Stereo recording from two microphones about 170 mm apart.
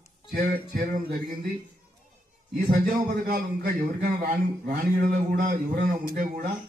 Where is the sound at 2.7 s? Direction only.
55° right (ahead or behind).